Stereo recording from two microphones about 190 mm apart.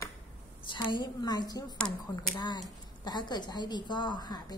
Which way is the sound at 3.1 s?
20° left (ahead or behind).